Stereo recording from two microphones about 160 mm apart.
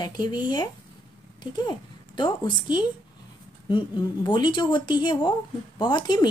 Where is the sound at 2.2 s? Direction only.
30° left (ahead or behind).